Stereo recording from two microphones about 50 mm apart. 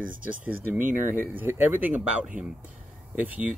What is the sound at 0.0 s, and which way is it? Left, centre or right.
A man's voice, right.